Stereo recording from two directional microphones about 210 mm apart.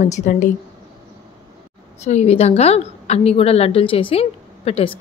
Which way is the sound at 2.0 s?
30° left (ahead or behind).